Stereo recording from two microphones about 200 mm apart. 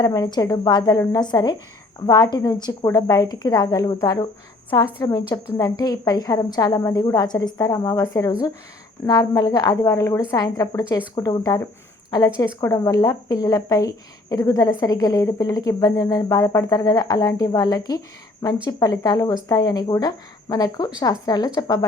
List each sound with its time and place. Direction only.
0.0 s speech: 20° left (ahead or behind)